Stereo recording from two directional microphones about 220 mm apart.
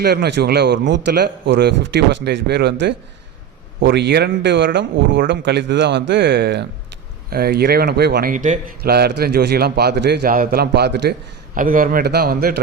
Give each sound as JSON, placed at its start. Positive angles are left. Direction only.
{"t": 0.0, "sound": "speech", "side_deg": -45}
{"t": 3.8, "sound": "speech", "side_deg": -50}